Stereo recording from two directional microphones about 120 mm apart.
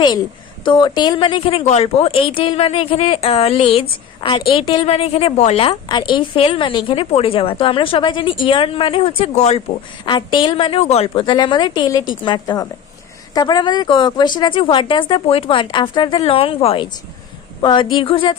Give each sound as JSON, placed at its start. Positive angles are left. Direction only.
{"t": 0.6, "sound": "a woman's voice", "side_deg": 40}
{"t": 5.7, "sound": "speech", "side_deg": 40}
{"t": 10.1, "sound": "a woman's voice", "side_deg": 40}